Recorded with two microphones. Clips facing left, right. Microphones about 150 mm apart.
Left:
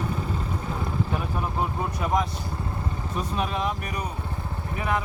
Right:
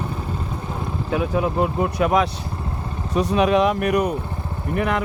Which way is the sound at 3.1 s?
80° right.